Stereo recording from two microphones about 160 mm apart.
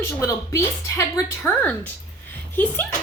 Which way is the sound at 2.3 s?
10° left (ahead or behind).